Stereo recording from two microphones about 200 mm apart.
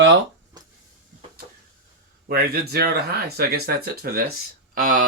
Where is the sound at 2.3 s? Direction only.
50° right (ahead or behind).